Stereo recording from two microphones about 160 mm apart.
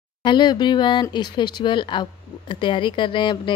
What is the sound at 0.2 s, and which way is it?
A woman's voice, 30° left (ahead or behind).